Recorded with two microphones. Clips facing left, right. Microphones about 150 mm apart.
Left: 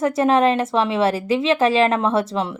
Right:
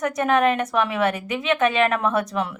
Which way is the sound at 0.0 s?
30° left (ahead or behind).